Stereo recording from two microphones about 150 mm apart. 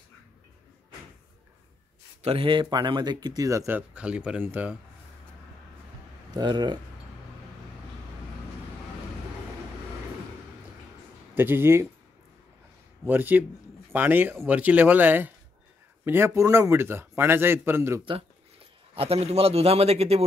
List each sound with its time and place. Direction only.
2.2 s speech: 35° right (ahead or behind); by 4.7 s 10° right (ahead or behind)
6.3 s speech: 30° right (ahead or behind)
11.3 s a man's voice: 15° right (ahead or behind)
13.0 s a man's voice: 10° right (ahead or behind)
18.9 s a man's voice: 40° right (ahead or behind)